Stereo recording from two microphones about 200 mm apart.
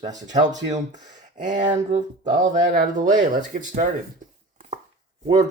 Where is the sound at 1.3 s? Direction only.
35° right (ahead or behind).